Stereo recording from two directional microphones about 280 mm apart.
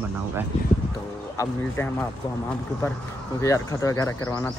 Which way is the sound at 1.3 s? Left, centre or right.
Centre.